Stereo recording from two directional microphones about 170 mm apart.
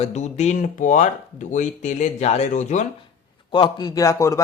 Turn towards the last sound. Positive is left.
turn(degrees=20)  # may be behind; listen again after turning